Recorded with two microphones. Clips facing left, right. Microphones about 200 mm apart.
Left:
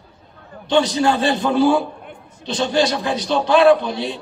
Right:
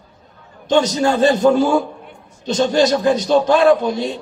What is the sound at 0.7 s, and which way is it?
A man's voice, 45° right (ahead or behind).